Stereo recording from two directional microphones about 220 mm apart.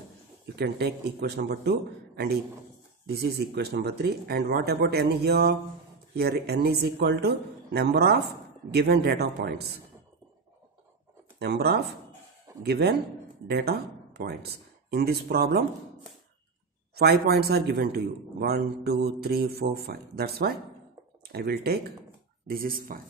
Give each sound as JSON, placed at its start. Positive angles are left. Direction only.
{"t": 0.6, "sound": "a man's voice", "side_deg": -50}
{"t": 3.1, "sound": "a man's voice", "side_deg": -45}
{"t": 11.3, "sound": "a man's voice", "side_deg": -50}
{"t": 16.9, "sound": "a man's voice", "side_deg": -45}